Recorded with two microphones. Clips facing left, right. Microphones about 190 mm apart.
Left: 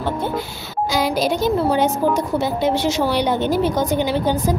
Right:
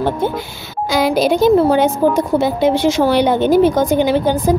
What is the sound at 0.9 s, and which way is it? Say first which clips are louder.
A child's voice: right 6 dB; 60° right (ahead or behind).